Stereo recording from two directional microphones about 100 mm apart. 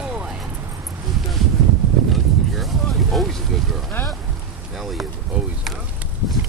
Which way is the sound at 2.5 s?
Centre (ahead or behind).